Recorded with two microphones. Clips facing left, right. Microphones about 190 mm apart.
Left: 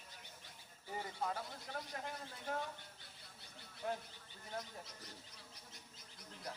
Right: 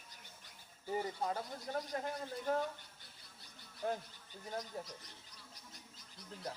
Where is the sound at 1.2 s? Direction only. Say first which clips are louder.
Right 4 dB; 40° right (ahead or behind).